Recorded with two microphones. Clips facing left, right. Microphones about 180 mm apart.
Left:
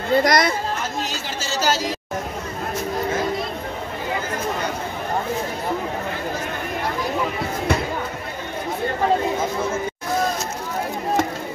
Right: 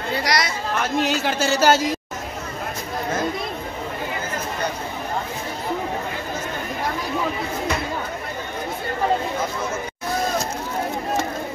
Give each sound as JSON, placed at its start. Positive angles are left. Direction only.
{"t": 0.1, "sound": "speech", "side_deg": 50}
{"t": 0.9, "sound": "speech", "side_deg": -65}